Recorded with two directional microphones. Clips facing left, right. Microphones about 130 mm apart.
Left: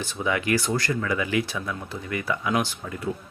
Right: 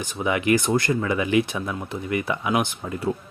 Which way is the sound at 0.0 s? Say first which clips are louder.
Right 3 dB; 20° right (ahead or behind).